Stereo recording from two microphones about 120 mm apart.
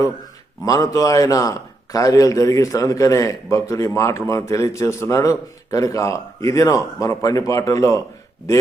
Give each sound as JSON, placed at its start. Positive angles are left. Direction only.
{"t": 0.6, "sound": "a man's voice", "side_deg": 30}